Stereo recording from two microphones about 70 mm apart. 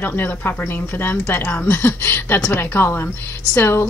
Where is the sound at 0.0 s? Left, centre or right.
Left.